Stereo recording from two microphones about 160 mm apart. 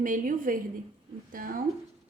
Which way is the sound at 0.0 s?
60° right (ahead or behind).